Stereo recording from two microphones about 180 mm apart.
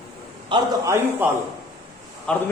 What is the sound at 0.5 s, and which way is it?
Speech, 25° right (ahead or behind).